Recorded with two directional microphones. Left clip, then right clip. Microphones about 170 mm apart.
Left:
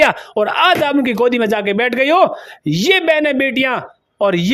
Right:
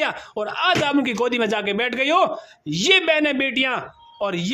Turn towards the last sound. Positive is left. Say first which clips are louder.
# left 9 dB
turn(degrees=35)  # may be behind; listen again after turning